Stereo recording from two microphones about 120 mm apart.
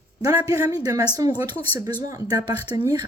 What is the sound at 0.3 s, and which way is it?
Speech, 30° right (ahead or behind).